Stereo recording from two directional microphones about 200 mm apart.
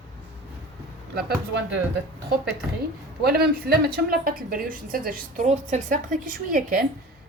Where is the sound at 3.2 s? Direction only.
50° right (ahead or behind).